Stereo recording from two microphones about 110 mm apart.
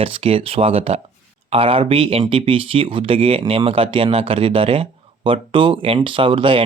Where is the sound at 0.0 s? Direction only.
60° right (ahead or behind).